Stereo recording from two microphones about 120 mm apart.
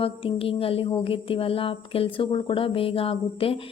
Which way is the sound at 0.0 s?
50° left (ahead or behind).